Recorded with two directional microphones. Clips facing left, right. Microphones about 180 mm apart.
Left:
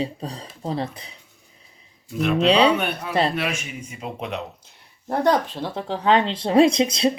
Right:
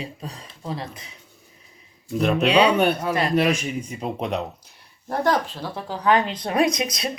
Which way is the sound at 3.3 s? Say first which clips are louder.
Right 7 dB; 35° right (ahead or behind).